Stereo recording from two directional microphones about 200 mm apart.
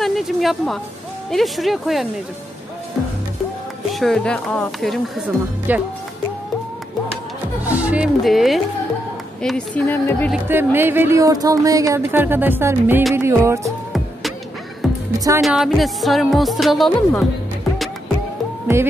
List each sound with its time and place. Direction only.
0.0 s a woman's voice: centre (ahead or behind)
3.9 s speech: centre (ahead or behind)
7.6 s speech: 5° right (ahead or behind); by 10.3 s 10° left (ahead or behind)
10.3 s speech: 10° right (ahead or behind)
13.7 s music: centre (ahead or behind)
15.1 s speech: 15° right (ahead or behind)
15.4 s speech: centre (ahead or behind)